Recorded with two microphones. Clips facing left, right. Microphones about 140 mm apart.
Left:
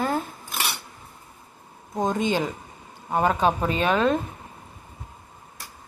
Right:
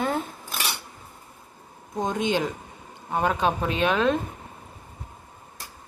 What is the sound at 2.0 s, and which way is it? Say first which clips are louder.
Speech: left 1 dB; centre (ahead or behind).